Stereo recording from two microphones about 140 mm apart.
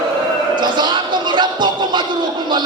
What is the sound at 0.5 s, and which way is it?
Music, 30° right (ahead or behind).